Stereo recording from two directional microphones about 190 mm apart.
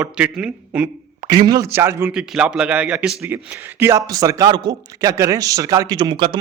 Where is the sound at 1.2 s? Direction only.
20° right (ahead or behind).